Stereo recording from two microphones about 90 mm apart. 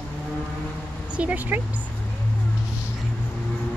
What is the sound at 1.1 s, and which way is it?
Speech, 20° right (ahead or behind).